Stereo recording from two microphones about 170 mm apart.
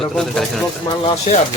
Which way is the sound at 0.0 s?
Centre (ahead or behind).